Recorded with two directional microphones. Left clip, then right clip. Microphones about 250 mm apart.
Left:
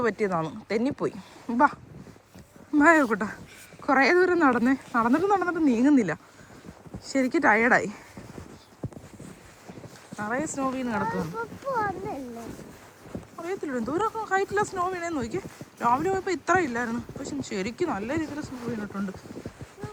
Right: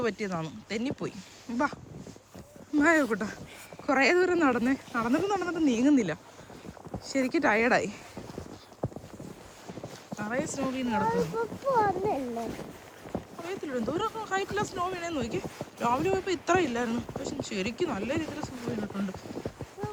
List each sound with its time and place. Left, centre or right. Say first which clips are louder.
0.0 s speech: left 6 dB; centre
8.8 s clip-clop: right 5 dB; centre
10.2 s speech: left 3 dB; centre
11.7 s speech: right 3 dB; right
13.4 s speech: left 3 dB; centre